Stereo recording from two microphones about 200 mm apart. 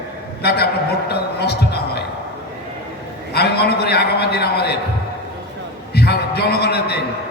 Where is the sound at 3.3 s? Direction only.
55° left (ahead or behind).